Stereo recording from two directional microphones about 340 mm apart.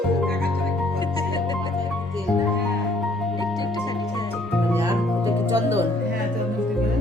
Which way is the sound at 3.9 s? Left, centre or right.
Centre.